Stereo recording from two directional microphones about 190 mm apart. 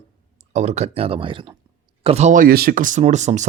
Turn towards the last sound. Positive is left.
turn(degrees=-40)  # may be behind; listen again after turning